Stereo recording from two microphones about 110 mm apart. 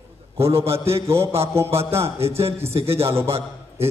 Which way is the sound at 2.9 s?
25° right (ahead or behind).